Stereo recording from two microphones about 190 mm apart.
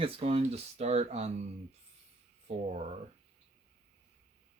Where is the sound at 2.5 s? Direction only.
35° right (ahead or behind).